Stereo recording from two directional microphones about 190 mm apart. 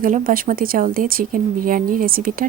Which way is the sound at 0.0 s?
45° right (ahead or behind).